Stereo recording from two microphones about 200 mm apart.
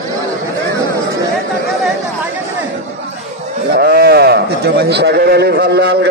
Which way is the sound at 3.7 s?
50° right (ahead or behind).